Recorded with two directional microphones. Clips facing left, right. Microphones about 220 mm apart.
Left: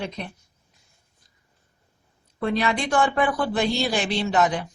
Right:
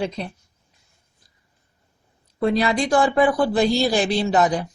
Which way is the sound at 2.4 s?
35° right (ahead or behind).